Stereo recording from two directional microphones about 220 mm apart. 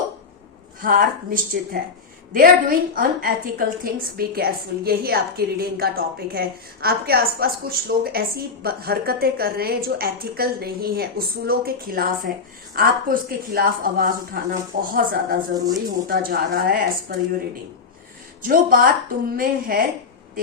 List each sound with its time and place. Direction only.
0.8 s a woman's voice: 40° right (ahead or behind)
15.5 s speech: 15° right (ahead or behind)
16.0 s speech: 40° right (ahead or behind)
18.4 s speech: 40° right (ahead or behind)